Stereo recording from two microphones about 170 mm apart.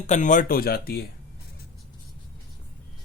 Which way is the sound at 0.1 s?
50° left (ahead or behind).